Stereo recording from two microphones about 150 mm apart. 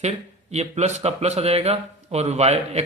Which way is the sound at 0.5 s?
45° right (ahead or behind).